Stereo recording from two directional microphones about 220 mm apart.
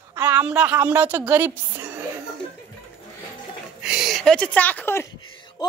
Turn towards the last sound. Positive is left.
turn(degrees=20)  # may be behind; listen again after turning